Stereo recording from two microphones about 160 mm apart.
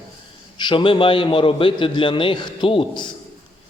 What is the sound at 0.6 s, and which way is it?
A man's voice, 30° left (ahead or behind).